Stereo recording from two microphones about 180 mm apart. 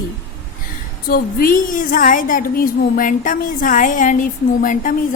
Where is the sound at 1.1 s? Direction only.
55° left (ahead or behind).